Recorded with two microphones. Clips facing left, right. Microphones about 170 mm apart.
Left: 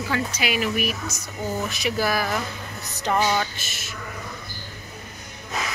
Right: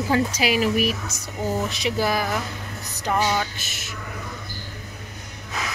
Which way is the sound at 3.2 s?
Centre (ahead or behind).